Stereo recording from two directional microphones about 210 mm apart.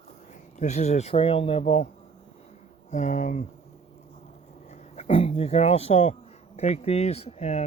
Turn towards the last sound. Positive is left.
turn(degrees=30)  # may be behind; listen again after turning